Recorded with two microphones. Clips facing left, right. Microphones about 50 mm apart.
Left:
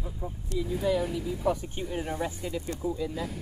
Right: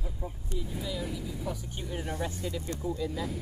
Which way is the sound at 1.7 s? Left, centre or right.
Centre.